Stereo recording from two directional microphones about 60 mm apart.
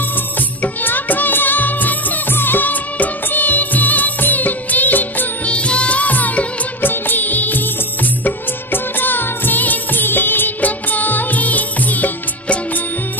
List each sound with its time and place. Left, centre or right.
0.8 s music: left
5.5 s music of bollywood: centre
8.7 s music of bollywood: left